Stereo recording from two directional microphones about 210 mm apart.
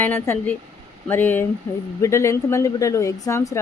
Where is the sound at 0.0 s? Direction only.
10° left (ahead or behind).